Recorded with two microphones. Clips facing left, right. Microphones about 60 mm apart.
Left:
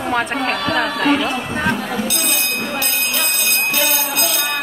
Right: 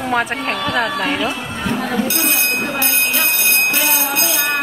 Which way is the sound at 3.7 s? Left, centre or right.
Right.